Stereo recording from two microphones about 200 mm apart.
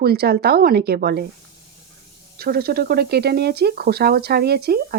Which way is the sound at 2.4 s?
50° right (ahead or behind).